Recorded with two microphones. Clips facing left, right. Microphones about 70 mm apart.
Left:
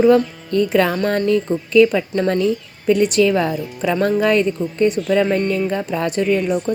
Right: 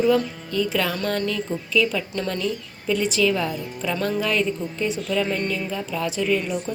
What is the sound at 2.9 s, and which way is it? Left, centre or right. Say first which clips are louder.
A woman's voice: left 7 dB; left.